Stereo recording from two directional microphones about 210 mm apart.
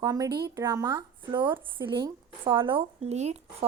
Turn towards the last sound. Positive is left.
turn(degrees=-30)  # may be behind; listen again after turning